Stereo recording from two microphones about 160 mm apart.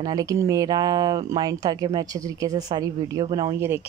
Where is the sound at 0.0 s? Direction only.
20° right (ahead or behind).